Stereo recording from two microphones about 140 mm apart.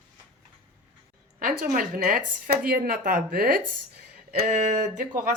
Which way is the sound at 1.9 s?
90° right.